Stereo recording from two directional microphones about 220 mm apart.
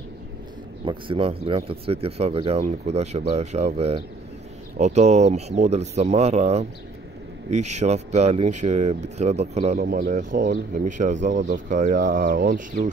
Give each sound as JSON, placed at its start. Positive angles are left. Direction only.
{"t": 0.8, "sound": "speech", "side_deg": -25}
{"t": 9.8, "sound": "speech", "side_deg": -40}